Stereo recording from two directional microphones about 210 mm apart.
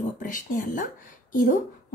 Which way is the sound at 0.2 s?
40° left (ahead or behind).